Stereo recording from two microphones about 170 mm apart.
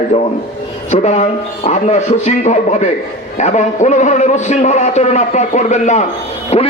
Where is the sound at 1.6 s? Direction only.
45° left (ahead or behind).